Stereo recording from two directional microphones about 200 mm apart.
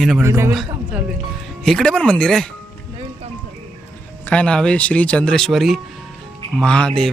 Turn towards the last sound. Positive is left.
turn(degrees=5)  # may be behind; listen again after turning